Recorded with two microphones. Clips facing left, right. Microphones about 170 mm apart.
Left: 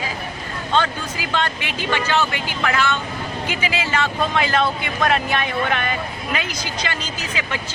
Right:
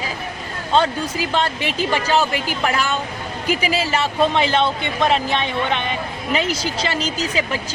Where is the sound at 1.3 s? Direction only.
35° right (ahead or behind).